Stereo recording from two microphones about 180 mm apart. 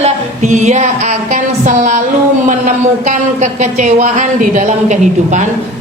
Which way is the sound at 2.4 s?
45° right (ahead or behind).